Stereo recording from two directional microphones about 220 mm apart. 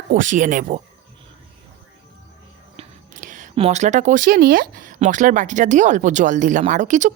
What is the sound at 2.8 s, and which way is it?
Speech, 35° right (ahead or behind).